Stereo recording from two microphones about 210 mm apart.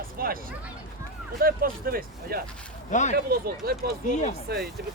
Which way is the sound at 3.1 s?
45° right (ahead or behind).